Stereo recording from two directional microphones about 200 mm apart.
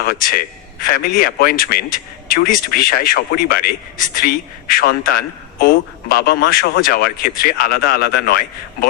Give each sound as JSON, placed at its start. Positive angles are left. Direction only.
{"t": 0.0, "sound": "speech", "side_deg": 45}